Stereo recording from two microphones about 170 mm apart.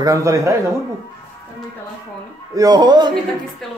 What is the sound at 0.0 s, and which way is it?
Speech, 20° right (ahead or behind).